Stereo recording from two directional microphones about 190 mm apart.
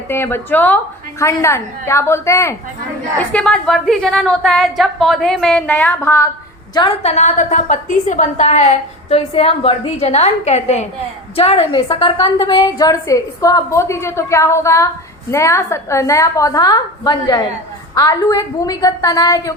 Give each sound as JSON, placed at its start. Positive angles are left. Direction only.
{"t": 0.1, "sound": "a woman's voice", "side_deg": 10}
{"t": 6.7, "sound": "a woman's voice", "side_deg": 30}